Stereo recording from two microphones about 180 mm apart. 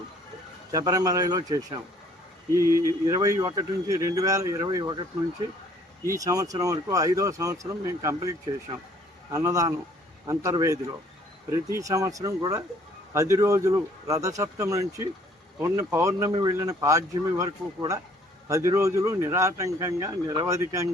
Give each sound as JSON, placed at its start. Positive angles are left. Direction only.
{"t": 0.7, "sound": "speech", "side_deg": -20}
{"t": 6.1, "sound": "speech", "side_deg": -20}